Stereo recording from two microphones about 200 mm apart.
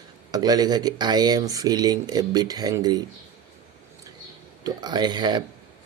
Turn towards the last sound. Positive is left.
turn(degrees=-20)  # may be behind; listen again after turning